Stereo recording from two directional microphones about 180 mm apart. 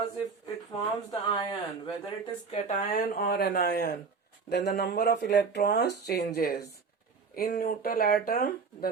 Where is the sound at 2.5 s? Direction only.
45° left (ahead or behind).